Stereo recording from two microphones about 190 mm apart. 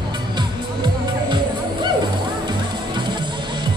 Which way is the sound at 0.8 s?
25° right (ahead or behind).